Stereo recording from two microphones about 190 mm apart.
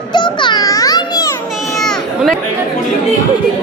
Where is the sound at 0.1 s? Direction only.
25° left (ahead or behind).